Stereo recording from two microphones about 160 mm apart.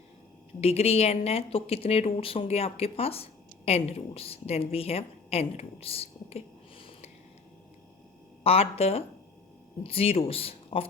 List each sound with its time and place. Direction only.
0.6 s a woman's voice: 40° left (ahead or behind)
8.4 s a woman's voice: 40° left (ahead or behind)